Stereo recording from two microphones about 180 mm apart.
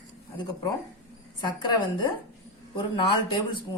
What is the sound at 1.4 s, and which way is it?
A woman's voice, 25° left (ahead or behind).